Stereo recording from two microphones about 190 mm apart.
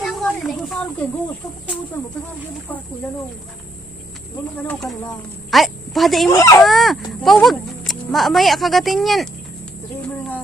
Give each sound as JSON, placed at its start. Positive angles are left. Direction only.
{"t": 0.0, "sound": "a sound", "side_deg": 0}
{"t": 4.6, "sound": "a woman's voice", "side_deg": 5}
{"t": 6.3, "sound": "speech", "side_deg": 15}
{"t": 6.6, "sound": "speech", "side_deg": 0}